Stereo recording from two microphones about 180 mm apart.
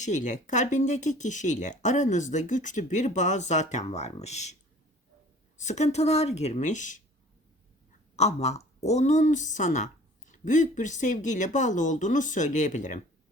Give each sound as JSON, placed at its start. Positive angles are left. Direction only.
{"t": 0.0, "sound": "speech", "side_deg": 45}
{"t": 5.5, "sound": "speech", "side_deg": 40}
{"t": 8.1, "sound": "speech", "side_deg": 40}